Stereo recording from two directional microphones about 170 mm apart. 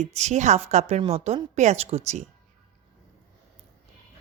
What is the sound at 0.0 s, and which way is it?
A woman's voice, 40° right (ahead or behind).